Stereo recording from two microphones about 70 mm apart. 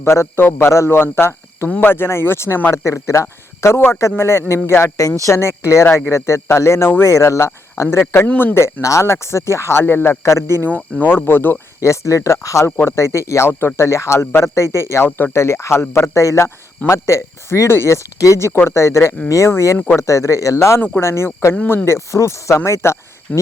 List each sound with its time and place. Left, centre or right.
0.0 s speech: left
2.8 s speech: left
8.3 s speech: left
8.5 s speech: left
10.7 s speech: left
11.8 s speech: left
13.5 s speech: left